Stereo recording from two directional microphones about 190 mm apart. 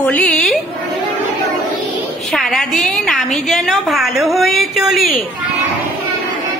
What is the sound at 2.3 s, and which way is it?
A woman's voice, centre (ahead or behind).